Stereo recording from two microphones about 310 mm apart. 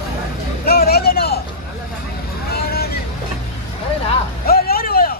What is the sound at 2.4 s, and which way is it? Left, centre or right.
Vehicle, left.